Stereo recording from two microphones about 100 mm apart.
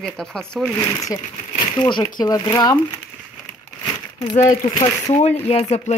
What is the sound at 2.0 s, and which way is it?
Speech, 35° left (ahead or behind).